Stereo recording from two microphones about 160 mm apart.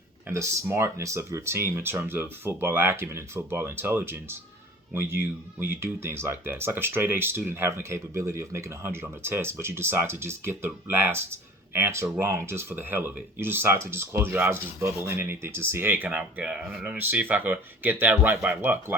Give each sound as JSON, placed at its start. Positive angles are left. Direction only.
{"t": 0.3, "sound": "speech", "side_deg": -15}